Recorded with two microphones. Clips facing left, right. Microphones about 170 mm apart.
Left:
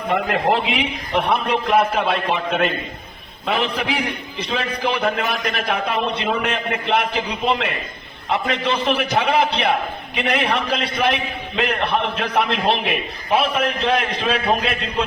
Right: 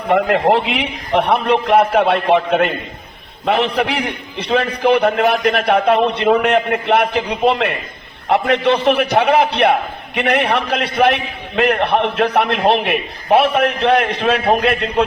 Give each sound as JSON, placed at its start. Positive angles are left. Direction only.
{"t": 0.1, "sound": "a man's voice", "side_deg": -60}